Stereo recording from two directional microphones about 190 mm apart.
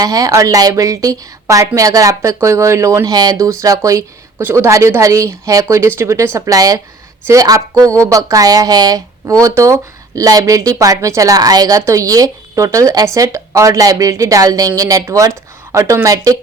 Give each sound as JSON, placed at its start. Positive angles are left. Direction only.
{"t": 0.0, "sound": "speech", "side_deg": -15}